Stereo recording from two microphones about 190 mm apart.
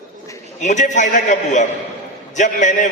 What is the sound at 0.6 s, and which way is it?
A man's voice, 40° left (ahead or behind).